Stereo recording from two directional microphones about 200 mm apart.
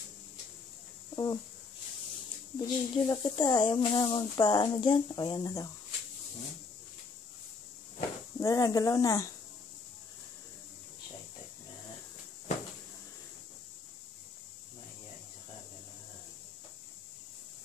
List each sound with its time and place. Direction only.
1.1 s speech: 20° left (ahead or behind)
2.6 s speech: 20° left (ahead or behind)
8.4 s speech: 15° left (ahead or behind)